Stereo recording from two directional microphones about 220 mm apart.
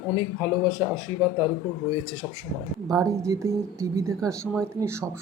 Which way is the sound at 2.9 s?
15° right (ahead or behind).